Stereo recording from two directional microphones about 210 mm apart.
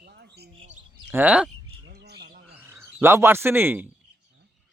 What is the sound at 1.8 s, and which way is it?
Squawk, 50° right (ahead or behind).